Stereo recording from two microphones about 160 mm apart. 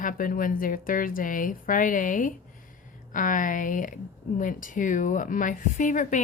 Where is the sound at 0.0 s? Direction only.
60° left (ahead or behind).